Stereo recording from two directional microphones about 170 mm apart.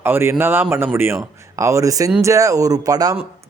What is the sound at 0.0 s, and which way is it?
A man's voice, 15° right (ahead or behind).